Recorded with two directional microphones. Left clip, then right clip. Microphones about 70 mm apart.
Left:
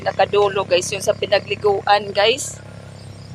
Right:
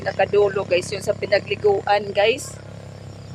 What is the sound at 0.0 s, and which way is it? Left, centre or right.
Speech, centre.